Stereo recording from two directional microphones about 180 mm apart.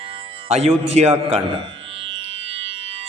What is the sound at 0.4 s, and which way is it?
Mantra, 35° right (ahead or behind).